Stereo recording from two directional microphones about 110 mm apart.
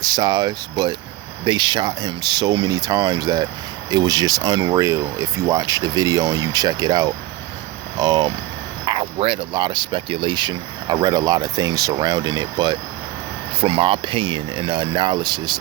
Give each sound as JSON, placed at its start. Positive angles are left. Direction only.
{"t": 0.0, "sound": "speech", "side_deg": -40}
{"t": 13.6, "sound": "speech", "side_deg": -55}